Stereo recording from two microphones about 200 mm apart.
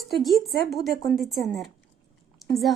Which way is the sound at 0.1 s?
Centre (ahead or behind).